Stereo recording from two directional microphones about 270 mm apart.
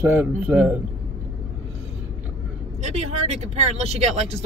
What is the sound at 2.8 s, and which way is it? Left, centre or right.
Speech, right.